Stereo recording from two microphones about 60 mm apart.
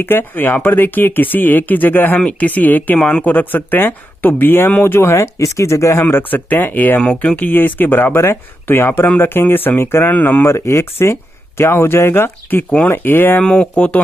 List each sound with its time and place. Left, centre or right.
0.0 s speech: left
3.0 s speech: centre; by 6.0 s left
6.0 s speech: left
7.0 s speech: centre; by 10.1 s left
10.1 s speech: left
10.4 s speech: left
13.4 s speech: centre